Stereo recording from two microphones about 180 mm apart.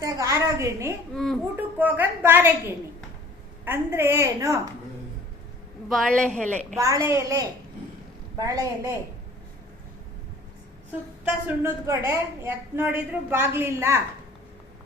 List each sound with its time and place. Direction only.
0.0 s a sound: 20° right (ahead or behind)
1.1 s a child's voice: centre (ahead or behind)
1.5 s a sound: 10° right (ahead or behind)
3.7 s a woman's voice: 15° right (ahead or behind)
5.9 s a woman's voice: 5° left (ahead or behind)
6.7 s a woman's voice: 15° right (ahead or behind)
11.4 s a woman's voice: 15° right (ahead or behind)